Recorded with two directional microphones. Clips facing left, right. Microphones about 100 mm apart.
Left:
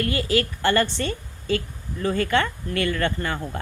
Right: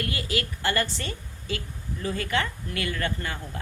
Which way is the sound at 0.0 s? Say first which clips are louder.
Left 7 dB; 35° left (ahead or behind).